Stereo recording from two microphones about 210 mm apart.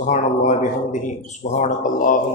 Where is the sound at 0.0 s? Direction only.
35° left (ahead or behind).